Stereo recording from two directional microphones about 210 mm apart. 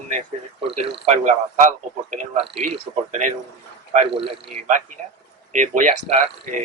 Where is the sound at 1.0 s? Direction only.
35° right (ahead or behind).